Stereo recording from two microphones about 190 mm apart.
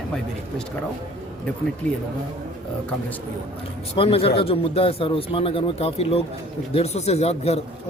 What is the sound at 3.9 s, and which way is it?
Speech, 30° left (ahead or behind).